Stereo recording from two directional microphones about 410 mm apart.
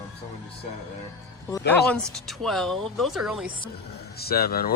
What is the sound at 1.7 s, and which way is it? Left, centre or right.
Speech, centre.